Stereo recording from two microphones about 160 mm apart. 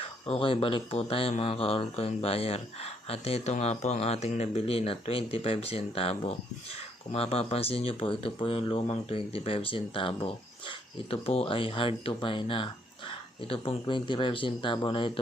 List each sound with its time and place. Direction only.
0.0 s speech: 35° left (ahead or behind)